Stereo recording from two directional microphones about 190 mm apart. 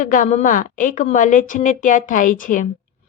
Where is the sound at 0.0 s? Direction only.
45° left (ahead or behind).